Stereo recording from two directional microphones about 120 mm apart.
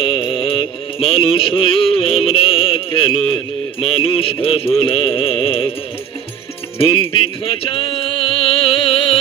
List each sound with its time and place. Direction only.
0.0 s music: 45° left (ahead or behind)
7.6 s music: 50° left (ahead or behind)